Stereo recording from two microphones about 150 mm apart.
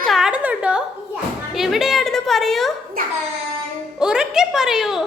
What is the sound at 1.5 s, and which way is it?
A woman's voice, centre (ahead or behind).